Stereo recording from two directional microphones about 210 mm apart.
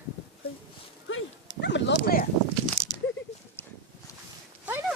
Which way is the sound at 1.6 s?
55° left (ahead or behind).